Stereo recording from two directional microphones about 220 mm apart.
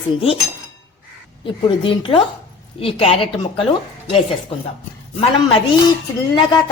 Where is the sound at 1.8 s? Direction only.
25° left (ahead or behind).